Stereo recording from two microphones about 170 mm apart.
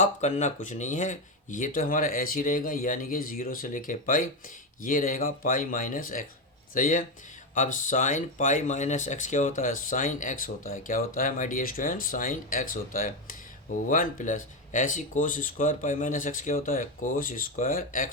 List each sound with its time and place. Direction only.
0.0 s speech: 45° left (ahead or behind)